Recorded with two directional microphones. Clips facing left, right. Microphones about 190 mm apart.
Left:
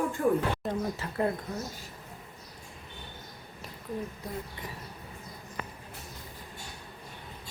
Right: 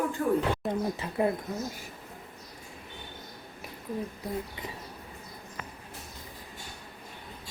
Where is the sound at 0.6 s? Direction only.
Centre (ahead or behind).